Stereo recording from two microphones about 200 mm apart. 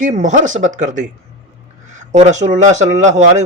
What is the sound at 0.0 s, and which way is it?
Speech, 40° right (ahead or behind).